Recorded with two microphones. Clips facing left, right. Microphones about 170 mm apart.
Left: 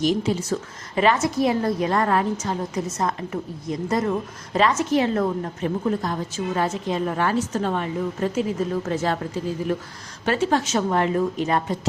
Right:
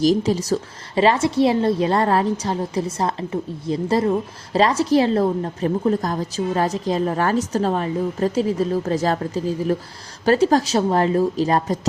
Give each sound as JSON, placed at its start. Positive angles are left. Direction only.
{"t": 0.0, "sound": "a woman's voice", "side_deg": -40}